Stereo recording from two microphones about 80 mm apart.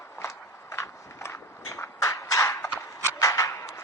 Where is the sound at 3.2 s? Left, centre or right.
Left.